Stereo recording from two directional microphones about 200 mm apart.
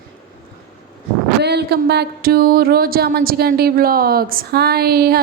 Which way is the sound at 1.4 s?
55° right (ahead or behind).